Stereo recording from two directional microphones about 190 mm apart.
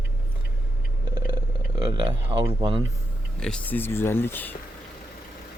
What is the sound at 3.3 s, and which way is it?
Speech, 5° left (ahead or behind).